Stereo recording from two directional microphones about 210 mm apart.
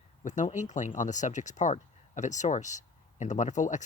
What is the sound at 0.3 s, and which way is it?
Speech, 35° left (ahead or behind).